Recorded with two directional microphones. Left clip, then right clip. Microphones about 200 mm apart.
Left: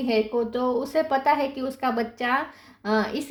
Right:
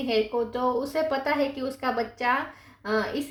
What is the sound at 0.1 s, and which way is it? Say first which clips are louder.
A woman's voice: left 2 dB; 40° left (ahead or behind).